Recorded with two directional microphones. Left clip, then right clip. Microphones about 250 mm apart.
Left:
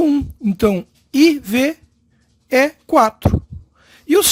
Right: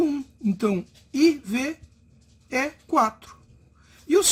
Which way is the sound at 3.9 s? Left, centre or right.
Left.